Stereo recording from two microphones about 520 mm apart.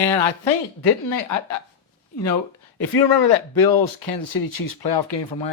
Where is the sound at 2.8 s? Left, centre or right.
Left.